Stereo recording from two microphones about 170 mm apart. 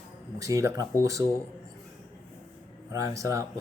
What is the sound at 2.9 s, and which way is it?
Speech, 20° right (ahead or behind).